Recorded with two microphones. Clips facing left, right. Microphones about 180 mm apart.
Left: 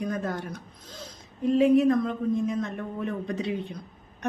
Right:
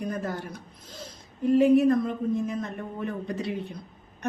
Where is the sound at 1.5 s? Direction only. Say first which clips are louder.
Right 1 dB; 5° right (ahead or behind).